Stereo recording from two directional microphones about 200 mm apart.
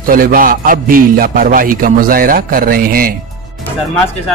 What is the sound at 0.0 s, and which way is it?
A man's voice, 45° right (ahead or behind).